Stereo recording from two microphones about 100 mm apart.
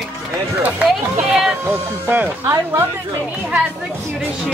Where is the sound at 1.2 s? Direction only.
5° right (ahead or behind).